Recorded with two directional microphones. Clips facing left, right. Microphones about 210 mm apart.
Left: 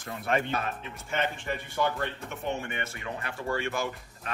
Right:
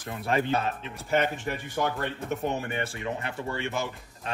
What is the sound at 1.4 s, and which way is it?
A man's voice, 45° right (ahead or behind).